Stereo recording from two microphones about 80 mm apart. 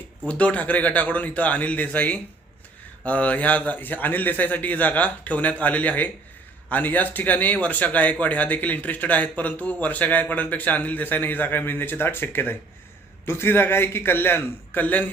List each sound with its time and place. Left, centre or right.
0.3 s speech: centre